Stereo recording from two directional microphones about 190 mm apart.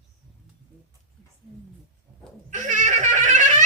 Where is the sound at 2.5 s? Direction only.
40° right (ahead or behind).